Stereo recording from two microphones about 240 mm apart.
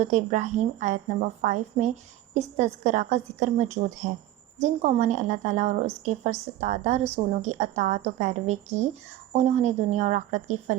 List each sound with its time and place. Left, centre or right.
0.0 s a woman's voice: right